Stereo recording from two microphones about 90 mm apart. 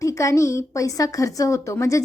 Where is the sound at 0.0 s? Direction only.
35° left (ahead or behind).